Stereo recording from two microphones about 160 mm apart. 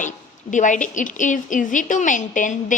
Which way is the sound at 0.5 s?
50° left (ahead or behind).